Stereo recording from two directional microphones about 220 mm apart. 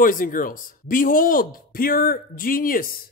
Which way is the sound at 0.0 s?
40° left (ahead or behind).